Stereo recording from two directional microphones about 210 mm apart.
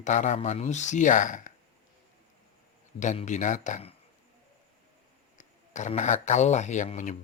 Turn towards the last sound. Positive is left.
turn(degrees=35)  # may be behind; listen again after turning